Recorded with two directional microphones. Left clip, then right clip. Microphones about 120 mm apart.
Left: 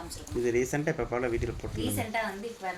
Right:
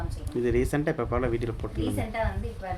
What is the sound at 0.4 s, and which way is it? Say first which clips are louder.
Speech: right 2 dB; 30° right (ahead or behind).